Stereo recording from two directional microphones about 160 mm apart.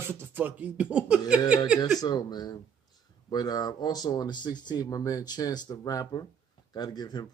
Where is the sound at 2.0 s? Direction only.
25° left (ahead or behind).